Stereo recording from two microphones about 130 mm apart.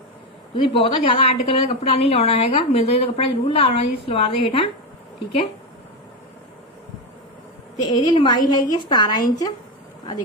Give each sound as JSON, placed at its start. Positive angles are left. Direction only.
{"t": 0.5, "sound": "speech", "side_deg": 40}
{"t": 7.9, "sound": "a woman's voice", "side_deg": 35}